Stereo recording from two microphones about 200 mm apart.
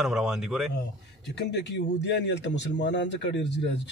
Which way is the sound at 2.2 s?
60° left (ahead or behind).